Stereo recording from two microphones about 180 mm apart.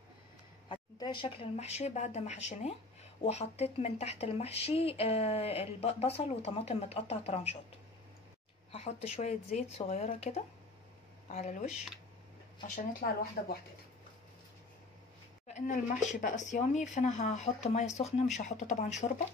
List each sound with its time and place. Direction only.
0.7 s a woman's voice: 25° left (ahead or behind)
8.7 s a woman's voice: 35° left (ahead or behind)
12.6 s speech: 50° left (ahead or behind)
15.4 s a woman's voice: 40° left (ahead or behind)